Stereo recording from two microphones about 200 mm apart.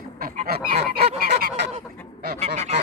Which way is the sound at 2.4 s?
35° right (ahead or behind).